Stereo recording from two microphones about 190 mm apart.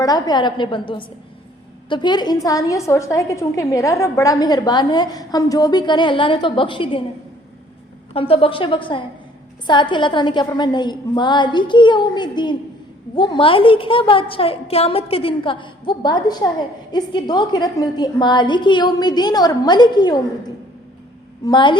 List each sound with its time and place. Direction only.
0.0 s a woman's voice: 20° left (ahead or behind)
8.1 s a woman's voice: 30° left (ahead or behind)
21.4 s a woman's voice: 25° left (ahead or behind)